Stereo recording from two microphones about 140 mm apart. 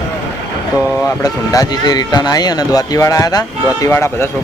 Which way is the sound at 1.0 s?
25° left (ahead or behind).